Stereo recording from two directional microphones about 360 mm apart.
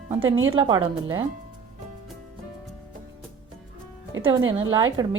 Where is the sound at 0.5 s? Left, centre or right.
Centre.